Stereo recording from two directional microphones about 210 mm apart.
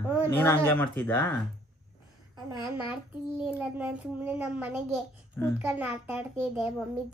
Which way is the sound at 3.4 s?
5° right (ahead or behind).